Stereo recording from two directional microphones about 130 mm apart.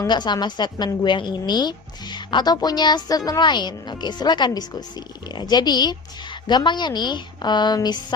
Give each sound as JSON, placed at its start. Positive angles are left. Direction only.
{"t": 0.1, "sound": "a woman's voice", "side_deg": 35}